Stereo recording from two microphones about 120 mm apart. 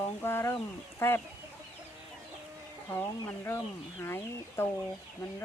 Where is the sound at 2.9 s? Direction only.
15° left (ahead or behind).